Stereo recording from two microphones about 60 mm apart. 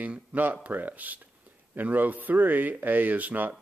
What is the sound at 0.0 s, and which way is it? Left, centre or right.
Speech, right.